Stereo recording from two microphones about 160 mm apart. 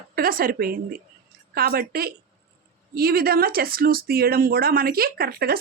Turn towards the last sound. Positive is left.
turn(degrees=-75)  # may be behind; listen again after turning